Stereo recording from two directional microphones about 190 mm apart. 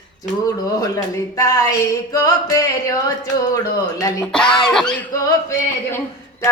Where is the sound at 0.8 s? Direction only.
15° left (ahead or behind).